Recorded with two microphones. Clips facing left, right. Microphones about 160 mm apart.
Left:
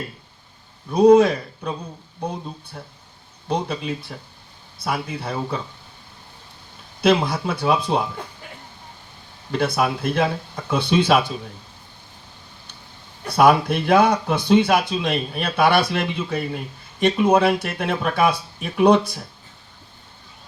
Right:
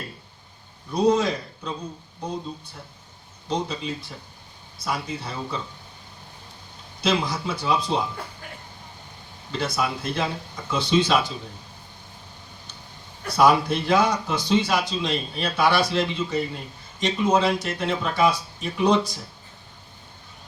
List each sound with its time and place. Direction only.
0.9 s speech: 55° left (ahead or behind)
3.5 s speech: 55° left (ahead or behind)
7.0 s speech: 55° left (ahead or behind)
9.5 s speech: 55° left (ahead or behind)
13.3 s speech: 60° left (ahead or behind)